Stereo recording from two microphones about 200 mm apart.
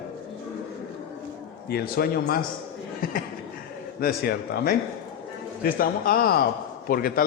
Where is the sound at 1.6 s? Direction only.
50° left (ahead or behind).